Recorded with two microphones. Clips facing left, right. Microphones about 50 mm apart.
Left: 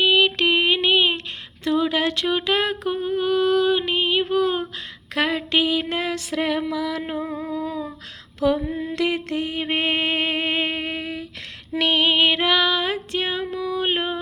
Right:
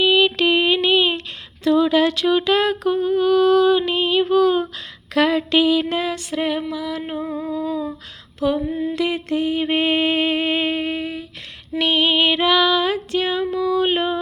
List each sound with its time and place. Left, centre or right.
0.0 s a sound: left
1.6 s humming: left
5.1 s a sound: left
5.9 s female singing: left
6.3 s music: left
7.2 s humming: left
8.5 s mantra: left
11.8 s female singing: left
13.4 s a sound: centre